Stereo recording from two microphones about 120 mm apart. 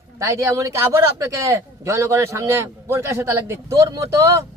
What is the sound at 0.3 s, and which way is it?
A man's voice, 25° right (ahead or behind).